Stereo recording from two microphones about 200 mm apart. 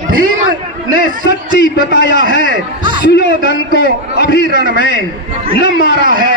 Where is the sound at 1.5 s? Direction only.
60° left (ahead or behind).